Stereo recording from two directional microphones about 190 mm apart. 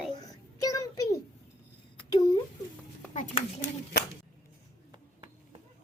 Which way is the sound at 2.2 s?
20° left (ahead or behind).